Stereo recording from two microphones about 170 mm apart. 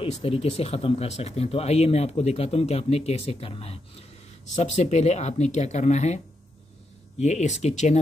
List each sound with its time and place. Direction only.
0.0 s speech: 35° left (ahead or behind)